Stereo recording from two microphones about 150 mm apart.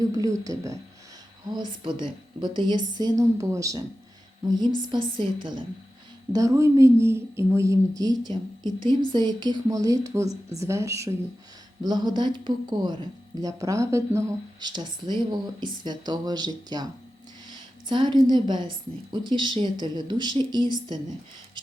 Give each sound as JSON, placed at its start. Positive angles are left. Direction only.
{"t": 0.0, "sound": "a woman's voice", "side_deg": -25}
{"t": 6.3, "sound": "a woman's voice", "side_deg": -20}